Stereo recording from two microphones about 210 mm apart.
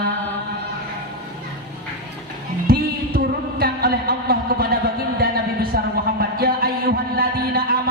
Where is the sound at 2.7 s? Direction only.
45° right (ahead or behind).